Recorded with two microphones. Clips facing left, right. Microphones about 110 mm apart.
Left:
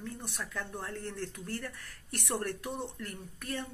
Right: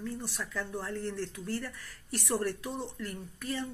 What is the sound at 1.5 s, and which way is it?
Speech, 55° left (ahead or behind).